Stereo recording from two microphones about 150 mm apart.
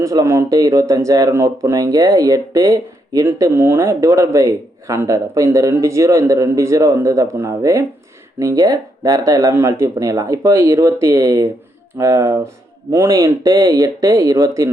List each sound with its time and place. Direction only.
0.0 s speech: 20° right (ahead or behind)